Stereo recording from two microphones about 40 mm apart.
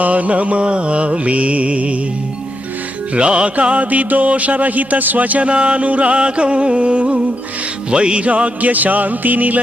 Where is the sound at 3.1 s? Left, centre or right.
Right.